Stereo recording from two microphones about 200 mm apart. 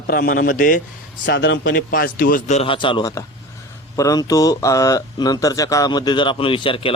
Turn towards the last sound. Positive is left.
turn(degrees=25)  # may be behind; listen again after turning